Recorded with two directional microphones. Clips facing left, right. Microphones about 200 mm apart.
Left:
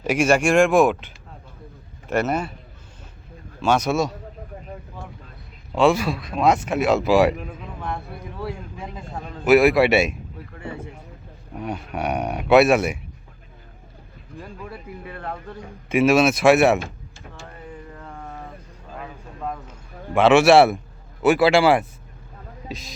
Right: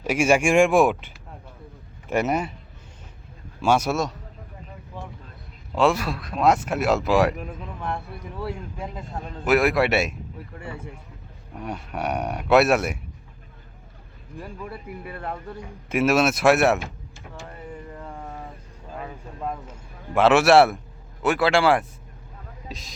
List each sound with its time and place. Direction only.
0.0 s speech: centre (ahead or behind)
0.3 s speech: 10° right (ahead or behind)
3.6 s speech: 10° right (ahead or behind)
5.7 s speech: centre (ahead or behind)
8.4 s speech: centre (ahead or behind)
11.5 s speech: centre (ahead or behind)
15.9 s speech: 5° right (ahead or behind)
16.8 s a sound: 15° right (ahead or behind)
20.1 s speech: 5° right (ahead or behind)